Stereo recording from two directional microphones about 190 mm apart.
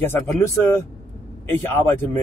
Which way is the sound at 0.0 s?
10° left (ahead or behind).